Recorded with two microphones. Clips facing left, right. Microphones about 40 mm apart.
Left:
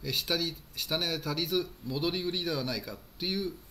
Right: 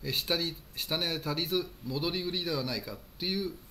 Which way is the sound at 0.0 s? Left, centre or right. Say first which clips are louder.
Even; centre.